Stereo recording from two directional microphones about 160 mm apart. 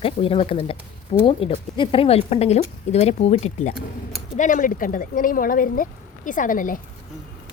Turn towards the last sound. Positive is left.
turn(degrees=55)  # may be behind; listen again after turning